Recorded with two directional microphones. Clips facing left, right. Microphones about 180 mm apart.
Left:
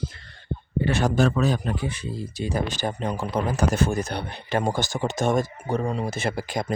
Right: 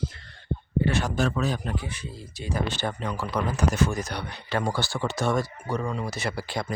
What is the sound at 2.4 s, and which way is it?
Speech, 15° right (ahead or behind).